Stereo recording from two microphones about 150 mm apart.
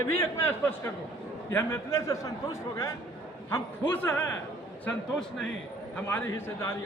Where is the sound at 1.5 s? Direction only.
15° left (ahead or behind).